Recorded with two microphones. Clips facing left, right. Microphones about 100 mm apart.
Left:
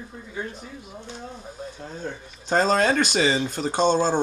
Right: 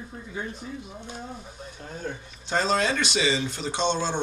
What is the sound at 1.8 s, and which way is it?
Speech, 35° left (ahead or behind).